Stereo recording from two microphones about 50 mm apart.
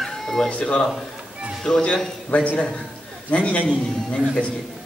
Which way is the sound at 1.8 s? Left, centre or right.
Left.